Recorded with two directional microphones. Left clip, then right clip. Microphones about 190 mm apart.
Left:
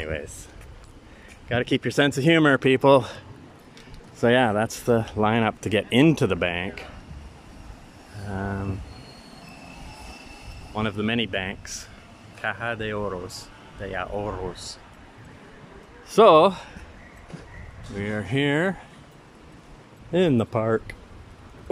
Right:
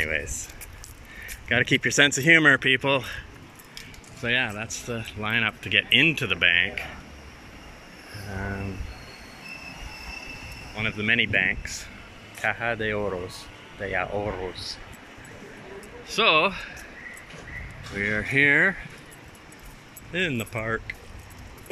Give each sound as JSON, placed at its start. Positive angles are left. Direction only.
{"t": 0.0, "sound": "speech", "side_deg": 5}
{"t": 4.2, "sound": "speech", "side_deg": 35}
{"t": 10.7, "sound": "speech", "side_deg": 20}
{"t": 16.1, "sound": "speech", "side_deg": 35}
{"t": 17.9, "sound": "speech", "side_deg": 5}
{"t": 20.1, "sound": "speech", "side_deg": 25}